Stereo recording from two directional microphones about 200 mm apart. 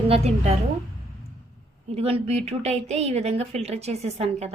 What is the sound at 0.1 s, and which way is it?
Speech, 35° right (ahead or behind).